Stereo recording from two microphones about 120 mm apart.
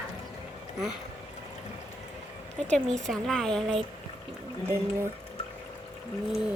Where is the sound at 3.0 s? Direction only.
5° left (ahead or behind).